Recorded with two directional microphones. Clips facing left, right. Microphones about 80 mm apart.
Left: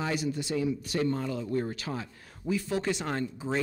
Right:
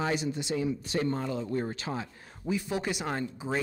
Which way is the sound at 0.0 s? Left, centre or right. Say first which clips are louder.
Right 1 dB; right.